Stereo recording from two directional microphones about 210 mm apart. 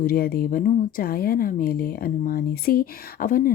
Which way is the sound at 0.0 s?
45° left (ahead or behind).